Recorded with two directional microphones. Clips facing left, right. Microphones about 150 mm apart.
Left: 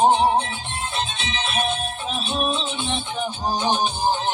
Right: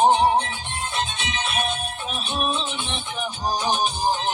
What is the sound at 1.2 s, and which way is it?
Music, 25° left (ahead or behind).